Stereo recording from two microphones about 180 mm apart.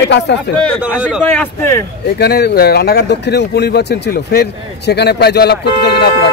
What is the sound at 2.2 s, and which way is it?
Speech, 65° left (ahead or behind).